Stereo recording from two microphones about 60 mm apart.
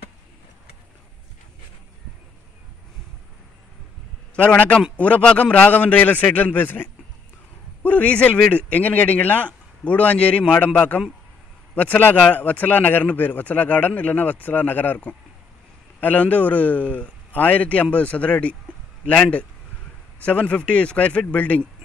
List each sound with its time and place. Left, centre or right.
4.4 s a man's voice: left
16.0 s a man's voice: left